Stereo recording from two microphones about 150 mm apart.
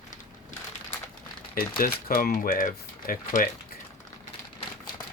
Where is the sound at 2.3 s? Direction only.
65° left (ahead or behind).